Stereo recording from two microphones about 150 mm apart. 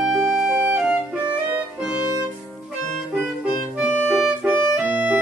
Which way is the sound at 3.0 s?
Centre (ahead or behind).